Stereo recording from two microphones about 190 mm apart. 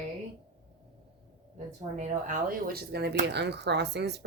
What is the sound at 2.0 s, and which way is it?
Speech, 45° right (ahead or behind).